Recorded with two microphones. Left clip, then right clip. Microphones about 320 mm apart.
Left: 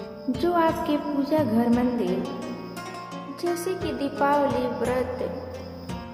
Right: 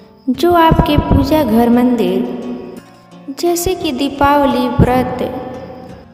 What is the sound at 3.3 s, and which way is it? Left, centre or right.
Music, right.